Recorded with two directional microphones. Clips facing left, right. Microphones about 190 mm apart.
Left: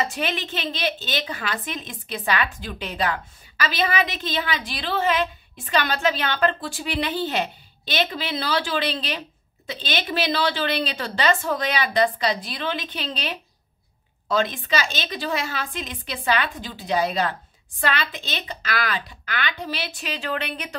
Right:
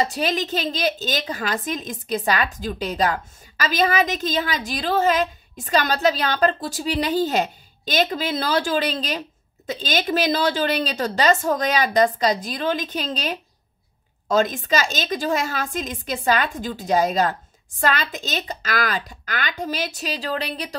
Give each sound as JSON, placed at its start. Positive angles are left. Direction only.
{"t": 0.0, "sound": "a woman's voice", "side_deg": -40}